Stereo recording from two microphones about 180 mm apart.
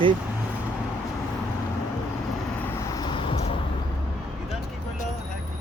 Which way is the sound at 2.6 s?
15° left (ahead or behind).